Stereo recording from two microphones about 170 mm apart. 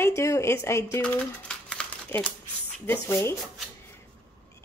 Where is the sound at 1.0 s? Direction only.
5° left (ahead or behind).